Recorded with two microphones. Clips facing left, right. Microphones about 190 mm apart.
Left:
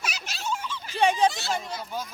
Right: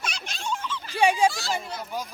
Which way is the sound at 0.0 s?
5° left (ahead or behind).